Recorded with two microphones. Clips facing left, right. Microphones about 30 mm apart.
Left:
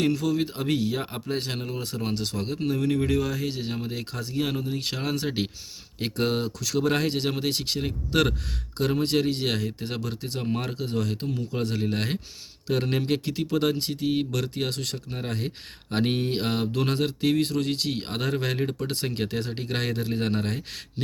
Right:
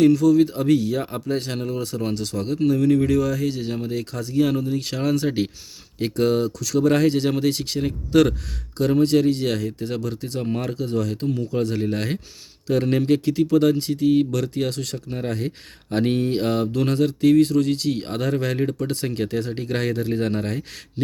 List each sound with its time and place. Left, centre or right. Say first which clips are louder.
0.0 s speech: right 9 dB; left
6.8 s speech: right 8 dB; centre
10.5 s speech: right 4 dB; centre
11.3 s speech: right 6 dB; centre